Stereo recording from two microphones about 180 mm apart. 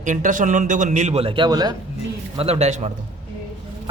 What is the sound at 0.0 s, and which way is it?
A man's voice, 45° right (ahead or behind).